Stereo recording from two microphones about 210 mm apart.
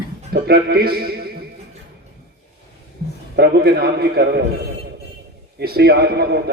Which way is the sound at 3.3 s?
50° right (ahead or behind).